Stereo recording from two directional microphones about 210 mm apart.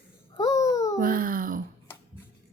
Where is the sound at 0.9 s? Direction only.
40° right (ahead or behind).